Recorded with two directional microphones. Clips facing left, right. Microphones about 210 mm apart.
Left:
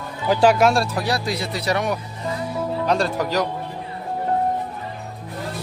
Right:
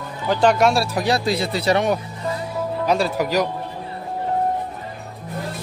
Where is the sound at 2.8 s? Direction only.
5° right (ahead or behind).